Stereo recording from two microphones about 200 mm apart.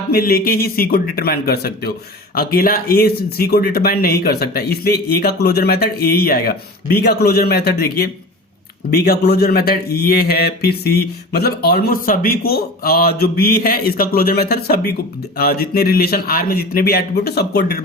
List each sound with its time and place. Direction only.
0.1 s speech: 50° left (ahead or behind)